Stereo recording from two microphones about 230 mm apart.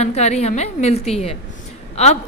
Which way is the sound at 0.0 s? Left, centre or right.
Left.